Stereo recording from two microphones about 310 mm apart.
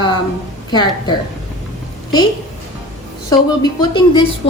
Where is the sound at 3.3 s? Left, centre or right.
Centre.